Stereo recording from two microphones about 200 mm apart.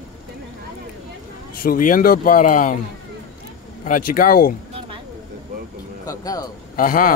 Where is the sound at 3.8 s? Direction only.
45° left (ahead or behind).